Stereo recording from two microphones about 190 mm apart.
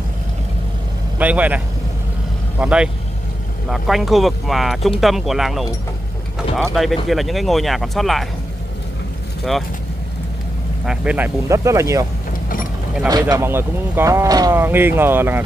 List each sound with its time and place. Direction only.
1.1 s speech: 10° right (ahead or behind)
2.6 s speech: 5° right (ahead or behind)
6.7 s speech: centre (ahead or behind)
9.4 s speech: centre (ahead or behind)
10.9 s speech: 10° right (ahead or behind)
12.3 s mechanisms: 50° left (ahead or behind)
13.1 s speech: 15° right (ahead or behind)